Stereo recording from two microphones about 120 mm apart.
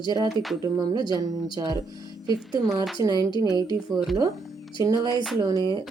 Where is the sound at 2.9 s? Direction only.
35° right (ahead or behind).